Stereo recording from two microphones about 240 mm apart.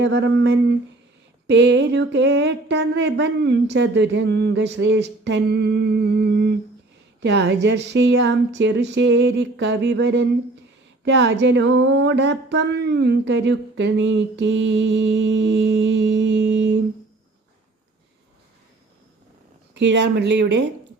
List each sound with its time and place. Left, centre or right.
0.0 s speech: right
19.7 s speech: right